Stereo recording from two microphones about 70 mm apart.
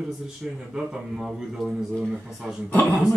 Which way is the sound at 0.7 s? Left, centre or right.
Centre.